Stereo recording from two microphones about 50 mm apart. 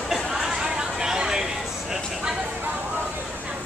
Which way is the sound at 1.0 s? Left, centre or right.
Centre.